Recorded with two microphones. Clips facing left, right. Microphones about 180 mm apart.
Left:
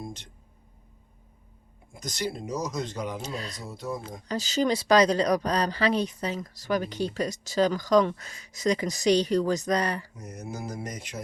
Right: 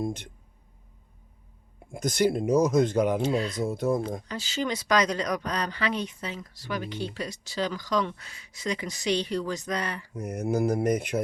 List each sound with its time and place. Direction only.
0.0 s speech: 55° right (ahead or behind)
1.9 s speech: 55° right (ahead or behind)
3.2 s speech: 40° left (ahead or behind)
3.6 s speech: 50° right (ahead or behind)
4.3 s speech: 40° left (ahead or behind)
10.2 s mantra: 55° right (ahead or behind)